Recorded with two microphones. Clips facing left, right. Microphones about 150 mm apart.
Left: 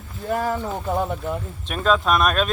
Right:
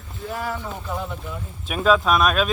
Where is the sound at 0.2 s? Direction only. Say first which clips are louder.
Left 6 dB; 45° left (ahead or behind).